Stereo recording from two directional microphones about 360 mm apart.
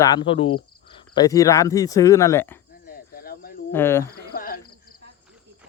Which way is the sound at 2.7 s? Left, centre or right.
Left.